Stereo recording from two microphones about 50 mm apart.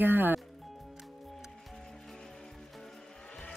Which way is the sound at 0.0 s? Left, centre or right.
Right.